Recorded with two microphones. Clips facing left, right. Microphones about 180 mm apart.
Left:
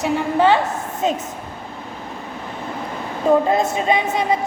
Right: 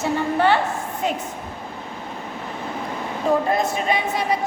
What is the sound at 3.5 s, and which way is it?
Speech, 25° left (ahead or behind).